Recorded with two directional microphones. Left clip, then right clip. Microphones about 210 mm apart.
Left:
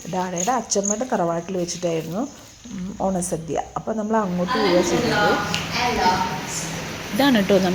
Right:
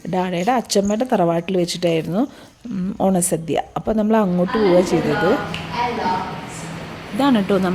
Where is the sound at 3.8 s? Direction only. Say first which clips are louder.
Right 5 dB; 35° right (ahead or behind).